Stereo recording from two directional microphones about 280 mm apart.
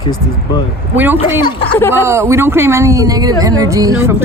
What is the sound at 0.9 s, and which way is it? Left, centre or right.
Speech, centre.